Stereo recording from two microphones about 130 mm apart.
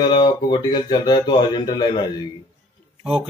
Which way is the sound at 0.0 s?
35° left (ahead or behind).